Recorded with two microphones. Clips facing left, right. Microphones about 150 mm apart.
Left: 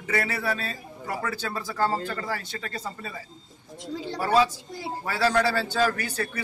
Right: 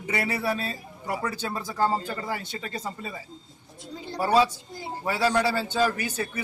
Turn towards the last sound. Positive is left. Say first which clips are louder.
# even
turn(degrees=-10)  # may be behind; listen again after turning